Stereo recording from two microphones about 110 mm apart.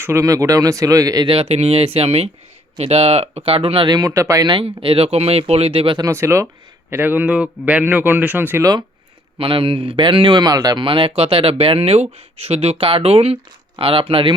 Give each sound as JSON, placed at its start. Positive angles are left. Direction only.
{"t": 0.0, "sound": "speech", "side_deg": -25}
{"t": 1.3, "sound": "speech", "side_deg": -65}
{"t": 3.8, "sound": "speech", "side_deg": -35}
{"t": 4.4, "sound": "speech", "side_deg": -55}
{"t": 6.0, "sound": "a man's voice", "side_deg": -25}
{"t": 9.4, "sound": "speech", "side_deg": -55}
{"t": 10.8, "sound": "speech", "side_deg": -55}